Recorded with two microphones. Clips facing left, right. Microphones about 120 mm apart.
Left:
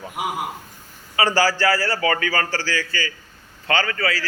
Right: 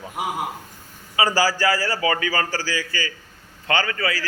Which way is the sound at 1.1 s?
15° right (ahead or behind).